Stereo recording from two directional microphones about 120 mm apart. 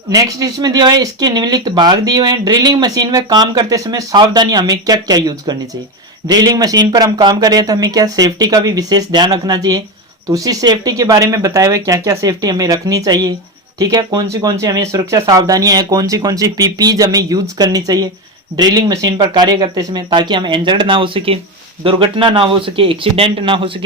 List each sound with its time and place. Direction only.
0.1 s speech: 30° right (ahead or behind); by 23.8 s 45° right (ahead or behind)